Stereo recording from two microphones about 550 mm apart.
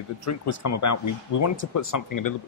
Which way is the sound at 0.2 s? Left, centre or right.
Left.